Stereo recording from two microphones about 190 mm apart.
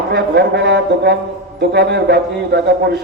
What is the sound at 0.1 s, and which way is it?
Speech, 60° right (ahead or behind).